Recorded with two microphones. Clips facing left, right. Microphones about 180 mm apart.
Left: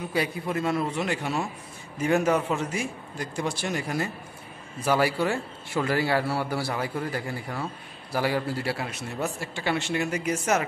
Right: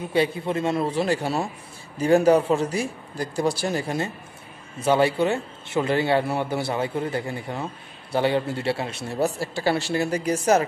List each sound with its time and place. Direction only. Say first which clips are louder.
0.1 s a man's voice: right 6 dB; 25° right (ahead or behind)